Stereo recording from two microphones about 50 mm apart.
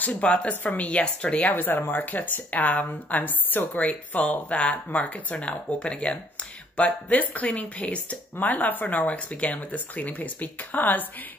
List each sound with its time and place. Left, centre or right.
0.0 s speech: left
1.5 s speech: left; by 6.1 s centre
6.9 s speech: left